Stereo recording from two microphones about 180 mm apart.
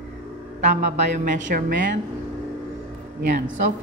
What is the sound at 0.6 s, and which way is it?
A woman's voice, 45° right (ahead or behind).